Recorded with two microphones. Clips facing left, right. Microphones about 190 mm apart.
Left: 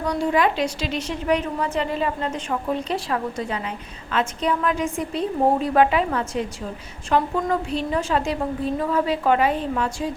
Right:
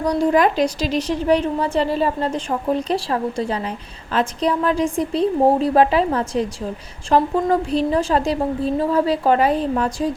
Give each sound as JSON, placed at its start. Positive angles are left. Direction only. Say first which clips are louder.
{"t": 0.0, "sound": "a woman's voice", "louder": "right 4 dB", "side_deg": -40}